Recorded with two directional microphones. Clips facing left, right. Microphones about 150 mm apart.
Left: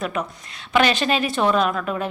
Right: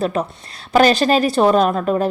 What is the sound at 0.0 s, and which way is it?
A woman's voice, 30° right (ahead or behind).